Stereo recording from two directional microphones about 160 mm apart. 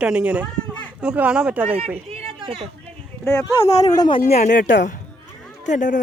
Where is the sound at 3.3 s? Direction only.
20° left (ahead or behind).